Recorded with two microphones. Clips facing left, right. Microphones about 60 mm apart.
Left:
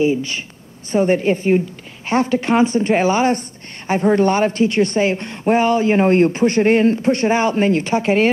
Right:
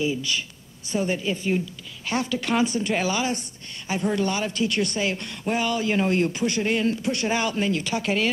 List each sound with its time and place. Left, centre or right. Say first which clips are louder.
0.0 s speech: left 8 dB; left